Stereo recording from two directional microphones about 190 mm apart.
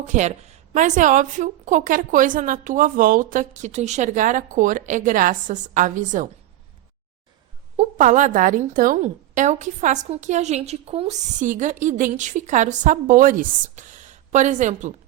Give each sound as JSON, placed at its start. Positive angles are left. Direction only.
{"t": 0.0, "sound": "a woman's voice", "side_deg": -40}
{"t": 7.8, "sound": "a woman's voice", "side_deg": -40}